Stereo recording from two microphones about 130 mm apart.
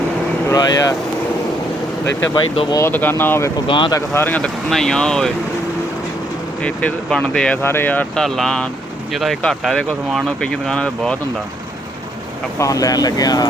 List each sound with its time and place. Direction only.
0.4 s vehicle: 30° left (ahead or behind)
2.3 s speech: 35° left (ahead or behind)
2.8 s speech: 15° left (ahead or behind)
3.7 s speech: 40° left (ahead or behind)
3.9 s speech: 15° left (ahead or behind)
6.6 s speech: 10° left (ahead or behind)
7.6 s speech: 15° left (ahead or behind)
12.5 s speech: 25° left (ahead or behind)